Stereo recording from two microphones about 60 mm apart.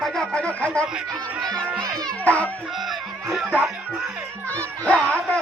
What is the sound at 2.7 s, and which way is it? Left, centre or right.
Speech, centre.